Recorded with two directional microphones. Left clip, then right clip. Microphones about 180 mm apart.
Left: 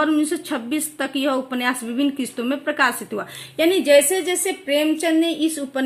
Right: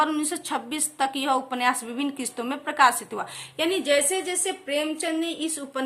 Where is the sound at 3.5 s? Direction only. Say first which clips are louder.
Left 8 dB; 25° left (ahead or behind).